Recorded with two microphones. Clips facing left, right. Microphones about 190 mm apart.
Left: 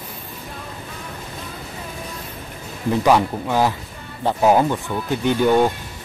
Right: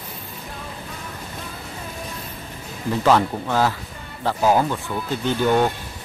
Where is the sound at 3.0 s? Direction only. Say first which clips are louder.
Even; 15° left (ahead or behind).